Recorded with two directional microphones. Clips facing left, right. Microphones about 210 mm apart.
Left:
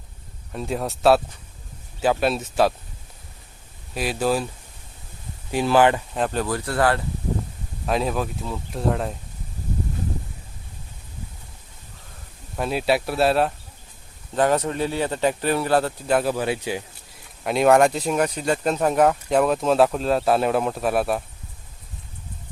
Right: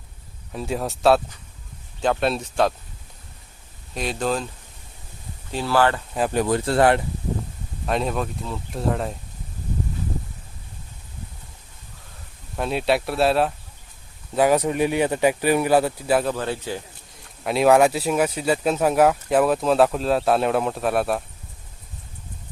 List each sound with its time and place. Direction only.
0.5 s speech: centre (ahead or behind)
3.9 s speech: 5° left (ahead or behind)
5.5 s speech: 15° left (ahead or behind)
6.1 s speech: 5° right (ahead or behind)
6.4 s speech: 25° right (ahead or behind)
7.9 s speech: centre (ahead or behind)
12.5 s speech: centre (ahead or behind)
14.3 s speech: 10° right (ahead or behind)
16.2 s speech: 10° left (ahead or behind)
17.4 s speech: centre (ahead or behind)